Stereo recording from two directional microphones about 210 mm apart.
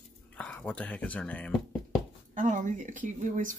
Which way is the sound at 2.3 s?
35° right (ahead or behind).